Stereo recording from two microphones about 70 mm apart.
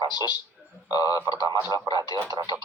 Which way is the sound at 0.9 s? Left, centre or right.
Left.